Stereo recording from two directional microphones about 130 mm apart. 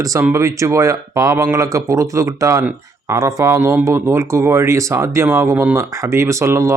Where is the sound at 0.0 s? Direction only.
25° right (ahead or behind).